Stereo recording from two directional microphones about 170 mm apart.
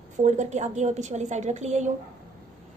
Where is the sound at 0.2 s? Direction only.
45° right (ahead or behind).